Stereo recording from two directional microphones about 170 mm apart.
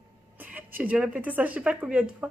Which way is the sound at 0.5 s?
10° right (ahead or behind).